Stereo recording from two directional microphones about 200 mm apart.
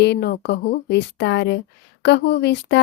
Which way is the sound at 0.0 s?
55° left (ahead or behind).